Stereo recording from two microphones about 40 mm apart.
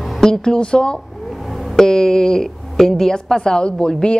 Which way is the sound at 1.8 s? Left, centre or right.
Centre.